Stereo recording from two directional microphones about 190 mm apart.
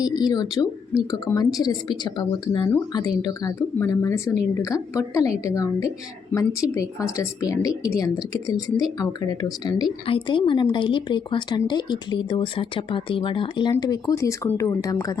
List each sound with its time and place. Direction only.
0.0 s speech: 20° left (ahead or behind)